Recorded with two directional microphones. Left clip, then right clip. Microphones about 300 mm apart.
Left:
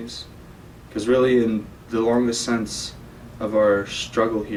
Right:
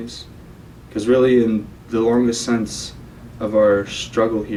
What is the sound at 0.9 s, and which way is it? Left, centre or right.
Speech, centre.